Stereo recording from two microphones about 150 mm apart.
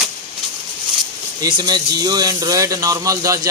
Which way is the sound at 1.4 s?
30° right (ahead or behind).